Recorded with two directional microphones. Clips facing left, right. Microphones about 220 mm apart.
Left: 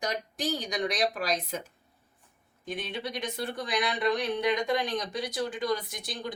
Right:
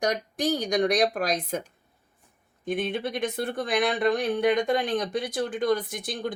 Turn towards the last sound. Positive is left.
turn(degrees=-50)  # may be behind; listen again after turning